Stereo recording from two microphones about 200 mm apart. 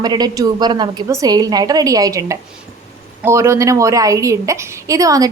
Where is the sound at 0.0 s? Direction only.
20° right (ahead or behind).